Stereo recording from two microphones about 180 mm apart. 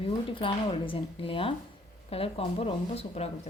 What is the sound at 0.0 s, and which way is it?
Speech, 30° left (ahead or behind).